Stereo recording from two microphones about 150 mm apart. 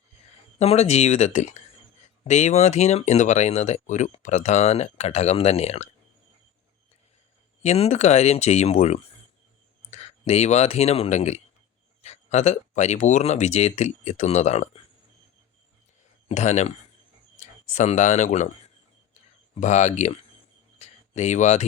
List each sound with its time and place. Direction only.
0.6 s speech: 45° left (ahead or behind)
7.6 s speech: 45° left (ahead or behind)
16.3 s speech: 50° left (ahead or behind)
19.5 s speech: 50° left (ahead or behind)
20.7 s a sound: 45° left (ahead or behind)